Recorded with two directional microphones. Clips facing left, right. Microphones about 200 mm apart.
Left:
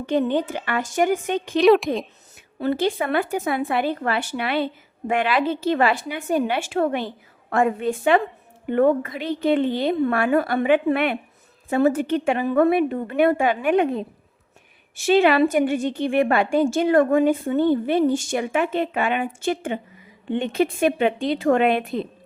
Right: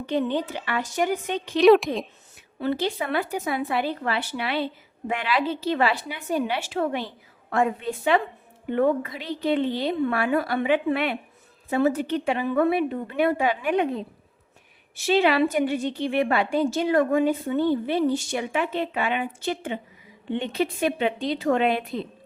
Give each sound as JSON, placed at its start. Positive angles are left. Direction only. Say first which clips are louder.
{"t": 0.0, "sound": "a woman's voice", "louder": "left 4 dB", "side_deg": 50}
{"t": 1.5, "sound": "speech", "louder": "even", "side_deg": 0}
{"t": 2.6, "sound": "a woman's voice", "louder": "left 4 dB", "side_deg": 50}